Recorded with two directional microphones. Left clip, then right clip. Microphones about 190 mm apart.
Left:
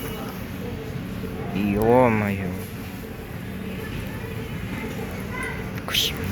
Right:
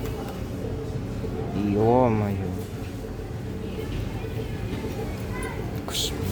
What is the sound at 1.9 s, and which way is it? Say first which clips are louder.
Speech: left 5 dB; 5° right (ahead or behind).